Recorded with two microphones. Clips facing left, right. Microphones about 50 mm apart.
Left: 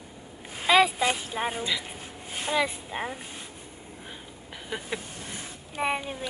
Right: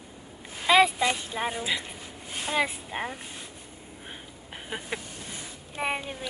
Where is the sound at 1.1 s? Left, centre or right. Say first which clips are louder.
Even; centre.